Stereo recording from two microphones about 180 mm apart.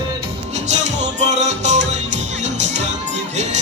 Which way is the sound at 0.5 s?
40° right (ahead or behind).